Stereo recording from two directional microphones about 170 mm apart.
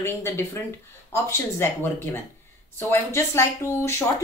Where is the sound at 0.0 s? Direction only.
15° left (ahead or behind).